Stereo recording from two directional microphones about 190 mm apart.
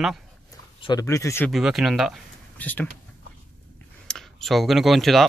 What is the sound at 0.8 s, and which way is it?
Speech, 20° left (ahead or behind).